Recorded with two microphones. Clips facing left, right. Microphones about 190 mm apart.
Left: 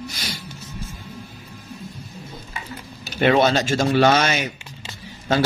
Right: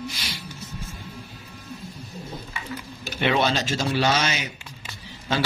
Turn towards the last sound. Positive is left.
turn(degrees=45)  # may be behind; listen again after turning